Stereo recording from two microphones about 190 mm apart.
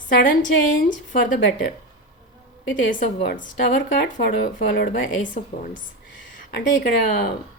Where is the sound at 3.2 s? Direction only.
60° left (ahead or behind).